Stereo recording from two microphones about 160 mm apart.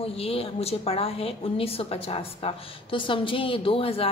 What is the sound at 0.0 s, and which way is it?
A woman's voice, 35° left (ahead or behind).